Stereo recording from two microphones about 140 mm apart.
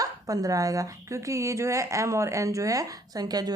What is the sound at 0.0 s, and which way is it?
Speech, 25° right (ahead or behind).